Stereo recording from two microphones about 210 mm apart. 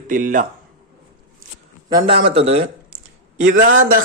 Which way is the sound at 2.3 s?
30° right (ahead or behind).